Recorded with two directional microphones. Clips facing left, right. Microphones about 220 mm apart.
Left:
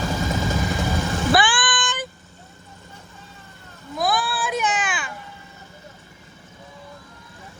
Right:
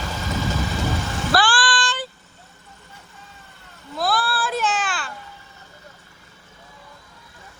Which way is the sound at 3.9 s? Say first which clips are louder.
Even; 15° left (ahead or behind).